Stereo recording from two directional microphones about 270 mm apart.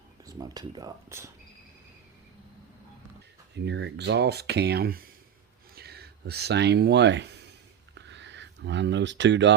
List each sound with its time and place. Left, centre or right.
0.3 s speech: centre
3.5 s speech: right
7.9 s a sound: right